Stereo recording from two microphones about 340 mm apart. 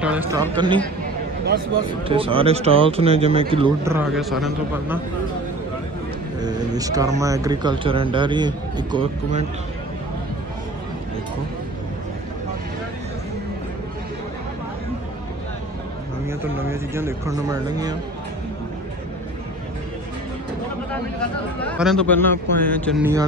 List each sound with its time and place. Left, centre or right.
0.0 s speech: centre
2.0 s speech: centre
6.4 s speech: centre
16.3 s speech: centre
20.9 s speech: centre